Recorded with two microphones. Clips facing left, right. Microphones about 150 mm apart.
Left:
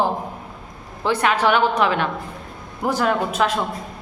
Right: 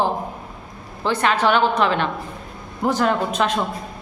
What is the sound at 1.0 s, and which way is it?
A woman's voice, 10° left (ahead or behind).